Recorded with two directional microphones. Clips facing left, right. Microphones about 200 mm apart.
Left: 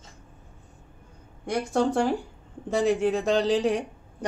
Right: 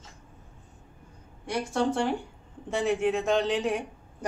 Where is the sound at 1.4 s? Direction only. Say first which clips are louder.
Left 3 dB; 40° left (ahead or behind).